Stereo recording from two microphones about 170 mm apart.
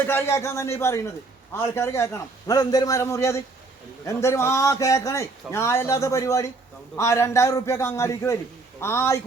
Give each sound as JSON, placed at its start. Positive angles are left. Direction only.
{"t": 0.0, "sound": "a man's voice", "side_deg": 15}